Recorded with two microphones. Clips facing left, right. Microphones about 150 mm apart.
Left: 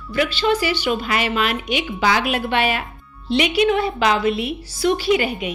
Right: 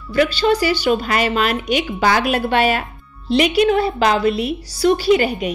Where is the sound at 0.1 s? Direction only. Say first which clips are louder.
Right 3 dB; 40° right (ahead or behind).